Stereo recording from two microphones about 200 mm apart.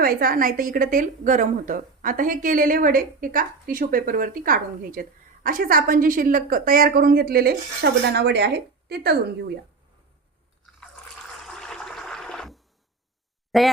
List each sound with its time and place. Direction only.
0.0 s a woman's voice: 45° right (ahead or behind)
11.3 s a sound: centre (ahead or behind)
13.5 s speech: centre (ahead or behind)